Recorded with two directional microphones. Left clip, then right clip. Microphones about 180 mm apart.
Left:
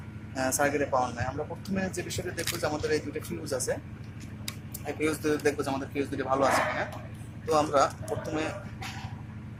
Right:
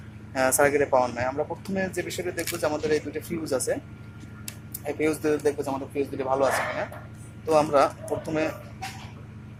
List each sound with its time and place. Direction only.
0.3 s a man's voice: 35° right (ahead or behind)
4.9 s a man's voice: 20° right (ahead or behind)